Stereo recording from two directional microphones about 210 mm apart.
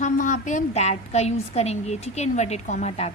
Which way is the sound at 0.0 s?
35° left (ahead or behind).